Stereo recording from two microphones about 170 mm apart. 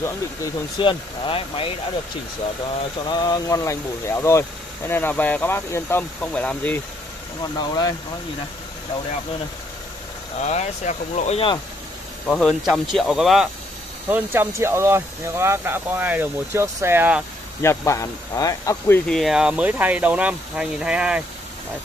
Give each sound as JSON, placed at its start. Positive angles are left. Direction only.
{"t": 0.7, "sound": "speech", "side_deg": 30}
{"t": 3.1, "sound": "speech", "side_deg": 20}
{"t": 7.5, "sound": "speech", "side_deg": 25}
{"t": 10.4, "sound": "speech", "side_deg": 45}
{"t": 12.3, "sound": "speech", "side_deg": 5}
{"t": 17.6, "sound": "speech", "side_deg": 15}
{"t": 19.0, "sound": "speech", "side_deg": 0}